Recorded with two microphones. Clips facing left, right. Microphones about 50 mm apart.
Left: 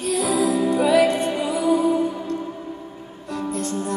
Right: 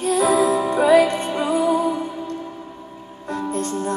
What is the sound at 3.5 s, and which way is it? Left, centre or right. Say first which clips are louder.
Music: right 2 dB; right.